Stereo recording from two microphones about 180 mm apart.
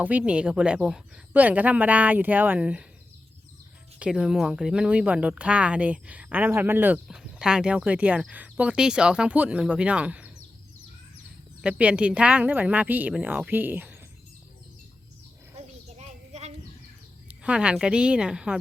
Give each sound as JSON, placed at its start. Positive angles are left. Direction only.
{"t": 0.0, "sound": "speech", "side_deg": -10}
{"t": 4.0, "sound": "speech", "side_deg": 0}
{"t": 11.6, "sound": "speech", "side_deg": -5}
{"t": 15.5, "sound": "a sound", "side_deg": -40}
{"t": 17.2, "sound": "a woman's voice", "side_deg": -5}